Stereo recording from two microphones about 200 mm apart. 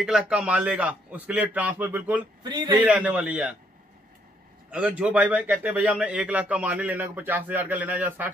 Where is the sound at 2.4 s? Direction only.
20° right (ahead or behind).